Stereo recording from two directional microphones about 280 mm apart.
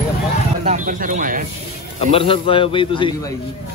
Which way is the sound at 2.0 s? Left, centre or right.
Centre.